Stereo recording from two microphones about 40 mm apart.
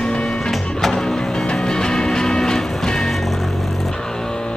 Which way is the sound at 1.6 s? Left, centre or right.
Centre.